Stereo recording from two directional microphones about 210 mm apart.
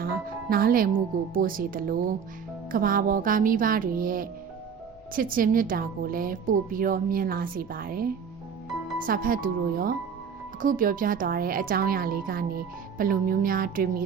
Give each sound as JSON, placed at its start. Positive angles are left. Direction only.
{"t": 0.5, "sound": "a woman's voice", "side_deg": -45}
{"t": 9.0, "sound": "a woman's voice", "side_deg": -40}